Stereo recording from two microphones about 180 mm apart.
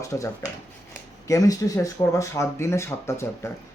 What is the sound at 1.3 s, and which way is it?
Speech, 20° left (ahead or behind).